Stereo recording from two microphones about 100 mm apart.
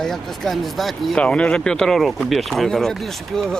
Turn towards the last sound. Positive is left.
turn(degrees=5)  # may be behind; listen again after turning